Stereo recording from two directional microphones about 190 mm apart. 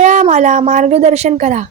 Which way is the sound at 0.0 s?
40° right (ahead or behind).